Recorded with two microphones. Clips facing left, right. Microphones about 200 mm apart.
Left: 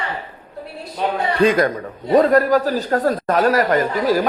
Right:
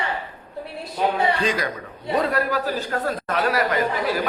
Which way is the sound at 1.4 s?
55° left (ahead or behind).